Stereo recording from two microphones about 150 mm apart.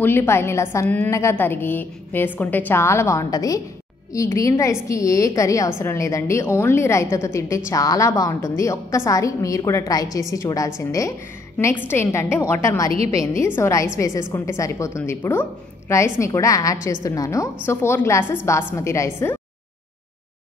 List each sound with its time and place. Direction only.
0.0 s a woman's voice: 15° left (ahead or behind)